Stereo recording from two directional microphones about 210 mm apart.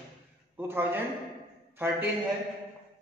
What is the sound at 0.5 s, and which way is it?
A man's voice, 10° right (ahead or behind).